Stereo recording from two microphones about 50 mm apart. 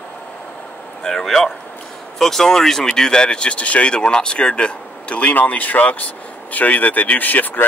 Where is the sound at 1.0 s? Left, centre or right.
Centre.